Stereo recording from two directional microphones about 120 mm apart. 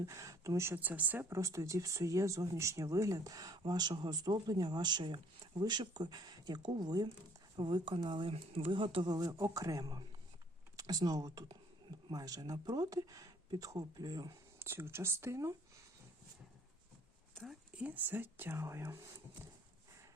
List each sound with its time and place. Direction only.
0.0 s speech: 25° right (ahead or behind); by 9.0 s 45° right (ahead or behind)
9.0 s speech: 30° right (ahead or behind)
14.6 s speech: 20° right (ahead or behind)
17.3 s speech: centre (ahead or behind); by 18.9 s 20° right (ahead or behind)